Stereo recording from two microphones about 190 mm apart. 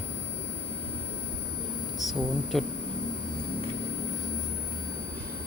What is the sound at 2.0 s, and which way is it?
Speech, centre (ahead or behind).